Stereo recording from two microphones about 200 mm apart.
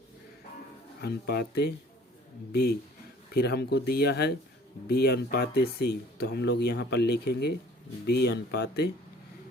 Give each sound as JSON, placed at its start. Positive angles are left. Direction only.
{"t": 1.0, "sound": "speech", "side_deg": 55}